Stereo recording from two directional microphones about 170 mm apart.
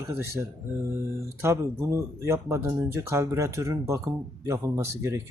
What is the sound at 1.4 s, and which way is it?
Speech, 15° right (ahead or behind).